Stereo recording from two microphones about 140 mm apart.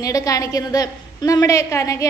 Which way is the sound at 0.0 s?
25° left (ahead or behind).